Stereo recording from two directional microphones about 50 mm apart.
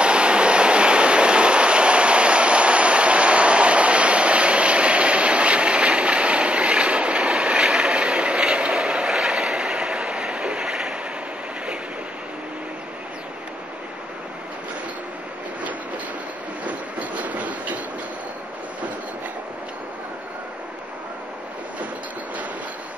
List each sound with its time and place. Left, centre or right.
0.0 s train: right
16.6 s train: right